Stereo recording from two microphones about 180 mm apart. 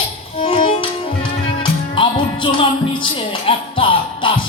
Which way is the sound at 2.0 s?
25° left (ahead or behind).